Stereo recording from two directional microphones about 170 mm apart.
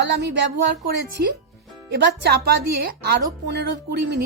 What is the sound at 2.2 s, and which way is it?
A woman's voice, 70° right (ahead or behind).